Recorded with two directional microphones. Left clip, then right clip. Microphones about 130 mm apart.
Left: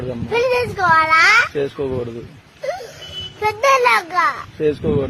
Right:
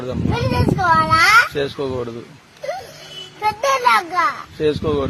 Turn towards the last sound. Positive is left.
turn(degrees=0)  # may be behind; listen again after turning